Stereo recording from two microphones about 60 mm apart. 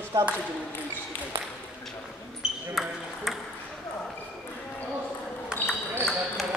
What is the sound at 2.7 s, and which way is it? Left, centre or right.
Speech, centre.